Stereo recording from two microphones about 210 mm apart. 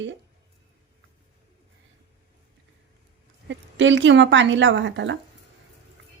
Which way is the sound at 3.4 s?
60° right (ahead or behind).